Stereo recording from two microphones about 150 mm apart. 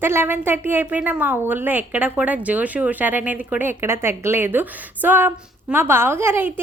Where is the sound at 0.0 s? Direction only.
15° right (ahead or behind).